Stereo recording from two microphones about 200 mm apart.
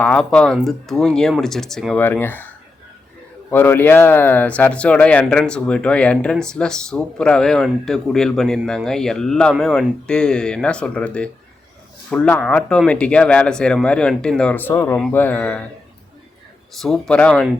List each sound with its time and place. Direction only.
0.0 s speech: 5° left (ahead or behind)
3.5 s speech: 10° left (ahead or behind)
16.8 s speech: 5° left (ahead or behind)